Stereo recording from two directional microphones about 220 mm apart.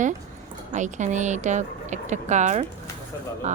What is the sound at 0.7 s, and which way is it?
Speech, 35° right (ahead or behind).